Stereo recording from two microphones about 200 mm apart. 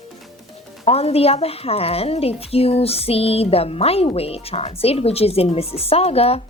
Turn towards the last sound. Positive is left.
turn(degrees=30)  # may be behind; listen again after turning